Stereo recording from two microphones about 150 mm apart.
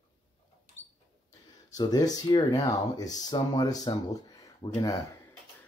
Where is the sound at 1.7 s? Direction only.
25° left (ahead or behind).